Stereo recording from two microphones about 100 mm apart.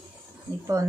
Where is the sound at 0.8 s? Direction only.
30° right (ahead or behind).